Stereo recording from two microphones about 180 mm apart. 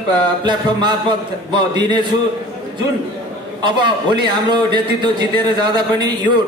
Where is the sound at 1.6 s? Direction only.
25° right (ahead or behind).